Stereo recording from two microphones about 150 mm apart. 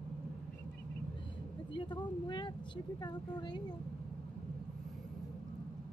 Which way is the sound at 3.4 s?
30° left (ahead or behind).